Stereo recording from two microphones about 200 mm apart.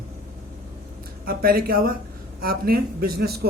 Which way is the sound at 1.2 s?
45° right (ahead or behind).